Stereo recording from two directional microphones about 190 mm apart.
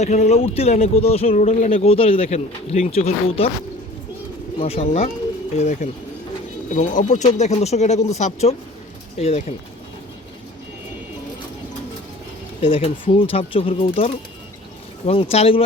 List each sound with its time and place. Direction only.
0.0 s speech: 35° left (ahead or behind)
4.6 s speech: 35° left (ahead or behind)
12.6 s speech: 30° left (ahead or behind)